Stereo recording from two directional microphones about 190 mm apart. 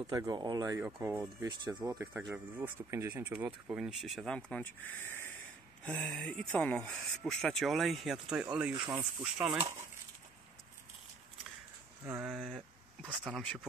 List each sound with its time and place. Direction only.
0.0 s speech: 15° right (ahead or behind)
0.8 s speech: 5° right (ahead or behind)
1.4 s speech: 20° right (ahead or behind); by 9.7 s 5° right (ahead or behind)
12.1 s speech: 5° right (ahead or behind)